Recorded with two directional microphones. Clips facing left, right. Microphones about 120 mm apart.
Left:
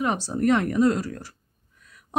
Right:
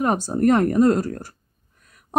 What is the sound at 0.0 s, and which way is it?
Speech, 45° right (ahead or behind).